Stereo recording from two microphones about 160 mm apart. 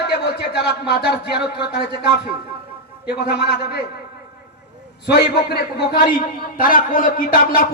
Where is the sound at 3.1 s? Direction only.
90° left.